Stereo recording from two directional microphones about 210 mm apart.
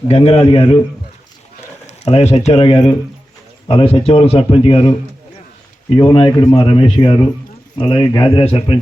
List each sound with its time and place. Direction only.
0.1 s a man's voice: 30° left (ahead or behind)
1.9 s a man's voice: 30° left (ahead or behind)